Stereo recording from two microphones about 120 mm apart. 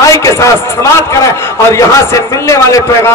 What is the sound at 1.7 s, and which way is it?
Speech, 25° left (ahead or behind).